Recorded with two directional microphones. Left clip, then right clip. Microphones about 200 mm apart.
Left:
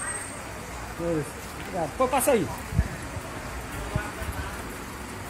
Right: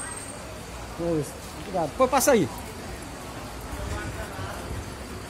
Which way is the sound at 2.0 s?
30° right (ahead or behind).